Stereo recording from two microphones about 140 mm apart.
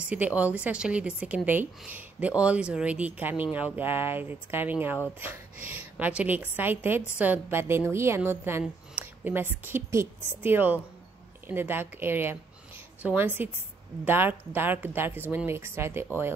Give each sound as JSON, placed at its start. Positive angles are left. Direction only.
{"t": 0.0, "sound": "a woman's voice", "side_deg": -10}